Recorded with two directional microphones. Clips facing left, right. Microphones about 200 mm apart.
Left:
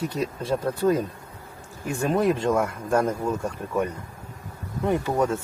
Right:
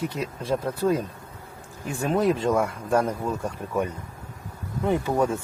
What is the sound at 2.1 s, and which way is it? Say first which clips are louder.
Speech: even; 5° right (ahead or behind).